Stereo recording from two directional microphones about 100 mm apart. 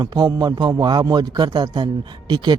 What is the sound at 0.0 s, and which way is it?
A man's voice, 40° right (ahead or behind).